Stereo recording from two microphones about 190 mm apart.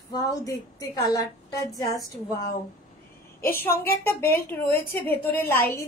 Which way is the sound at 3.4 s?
10° left (ahead or behind).